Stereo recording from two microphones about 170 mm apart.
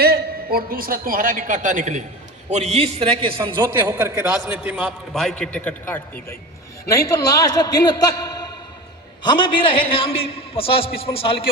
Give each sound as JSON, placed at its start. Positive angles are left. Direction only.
{"t": 0.0, "sound": "a man's voice", "side_deg": -60}
{"t": 3.9, "sound": "a man's voice", "side_deg": -15}